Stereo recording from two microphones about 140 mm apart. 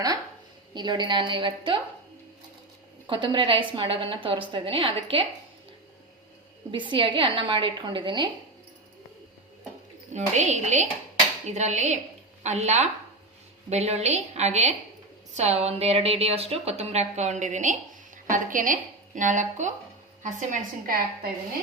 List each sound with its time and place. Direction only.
0.7 s a woman's voice: 30° right (ahead or behind)
3.1 s a woman's voice: 35° right (ahead or behind)
6.7 s a woman's voice: 35° right (ahead or behind)
10.1 s a woman's voice: 55° right (ahead or behind)
20.2 s a woman's voice: 80° right